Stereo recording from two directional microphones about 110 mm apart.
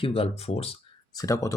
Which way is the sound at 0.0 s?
60° left (ahead or behind).